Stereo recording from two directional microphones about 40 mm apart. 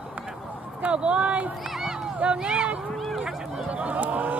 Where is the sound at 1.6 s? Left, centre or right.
Centre.